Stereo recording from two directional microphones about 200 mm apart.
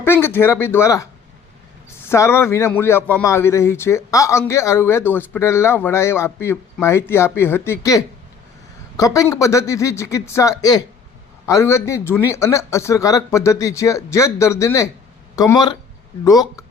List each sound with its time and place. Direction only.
0.0 s a man's voice: 10° left (ahead or behind)